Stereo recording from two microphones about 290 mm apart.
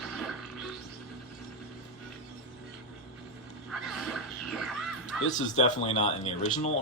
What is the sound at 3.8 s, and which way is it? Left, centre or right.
Music, centre.